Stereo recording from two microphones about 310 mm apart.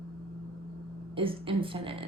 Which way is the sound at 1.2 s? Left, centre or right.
Centre.